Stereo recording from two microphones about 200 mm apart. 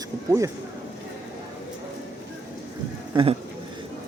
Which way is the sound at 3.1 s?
30° right (ahead or behind).